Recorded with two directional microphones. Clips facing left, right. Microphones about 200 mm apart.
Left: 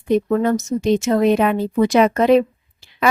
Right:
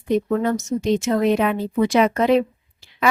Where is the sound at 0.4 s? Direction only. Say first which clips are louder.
Left 3 dB; 45° left (ahead or behind).